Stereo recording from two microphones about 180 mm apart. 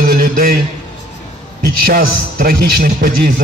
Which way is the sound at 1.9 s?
55° right (ahead or behind).